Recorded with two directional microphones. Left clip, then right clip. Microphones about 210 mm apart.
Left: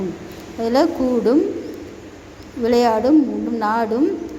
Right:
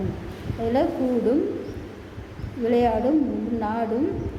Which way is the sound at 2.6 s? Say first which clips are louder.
Left 5 dB; 25° left (ahead or behind).